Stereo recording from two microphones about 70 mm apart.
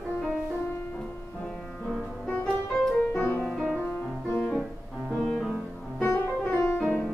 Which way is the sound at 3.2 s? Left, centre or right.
Left.